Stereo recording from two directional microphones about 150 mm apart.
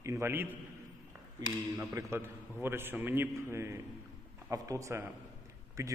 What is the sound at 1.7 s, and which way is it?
A man's voice, 20° right (ahead or behind).